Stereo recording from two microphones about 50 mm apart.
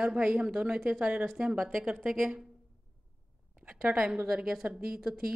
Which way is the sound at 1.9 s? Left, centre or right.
Right.